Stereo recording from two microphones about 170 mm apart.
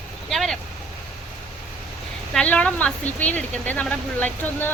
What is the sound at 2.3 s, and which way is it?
Speech, 5° left (ahead or behind).